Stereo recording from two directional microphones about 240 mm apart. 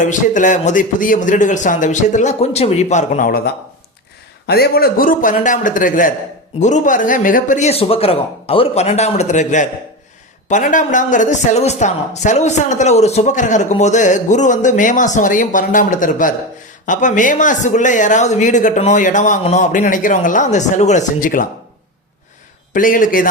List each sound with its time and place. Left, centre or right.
0.0 s a man's voice: left
22.7 s speech: left